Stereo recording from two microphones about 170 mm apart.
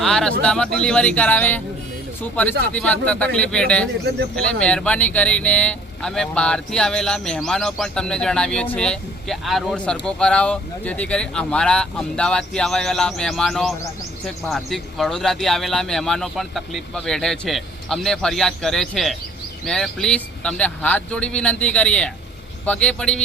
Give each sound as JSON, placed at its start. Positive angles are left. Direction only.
{"t": 0.0, "sound": "speech", "side_deg": 5}